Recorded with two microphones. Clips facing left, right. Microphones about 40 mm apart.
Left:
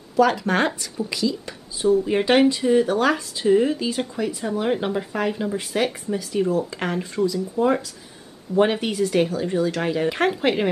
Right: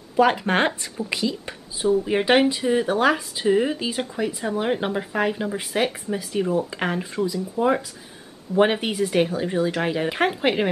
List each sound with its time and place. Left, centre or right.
0.1 s speech: right
1.8 s speech: centre